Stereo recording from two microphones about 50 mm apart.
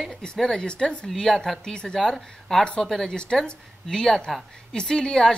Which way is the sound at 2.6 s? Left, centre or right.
Centre.